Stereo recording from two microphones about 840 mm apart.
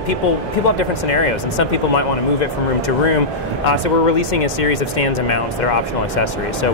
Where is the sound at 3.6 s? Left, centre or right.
Left.